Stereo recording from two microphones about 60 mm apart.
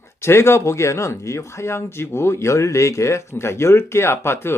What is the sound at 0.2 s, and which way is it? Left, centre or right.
Speech, left.